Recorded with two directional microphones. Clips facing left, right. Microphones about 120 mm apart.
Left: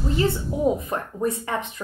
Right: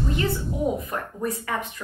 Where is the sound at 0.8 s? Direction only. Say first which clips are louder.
Left 3 dB; 25° left (ahead or behind).